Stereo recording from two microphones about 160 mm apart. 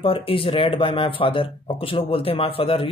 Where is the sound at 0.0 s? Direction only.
35° left (ahead or behind).